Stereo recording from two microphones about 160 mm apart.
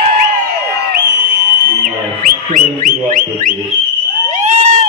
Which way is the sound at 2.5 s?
60° right (ahead or behind).